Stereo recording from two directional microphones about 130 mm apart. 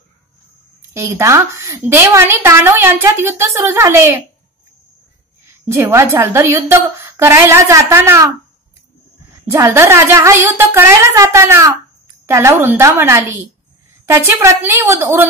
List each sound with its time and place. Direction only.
0.9 s a woman's voice: 20° right (ahead or behind)
5.7 s a woman's voice: 20° right (ahead or behind)
9.5 s a woman's voice: 20° right (ahead or behind)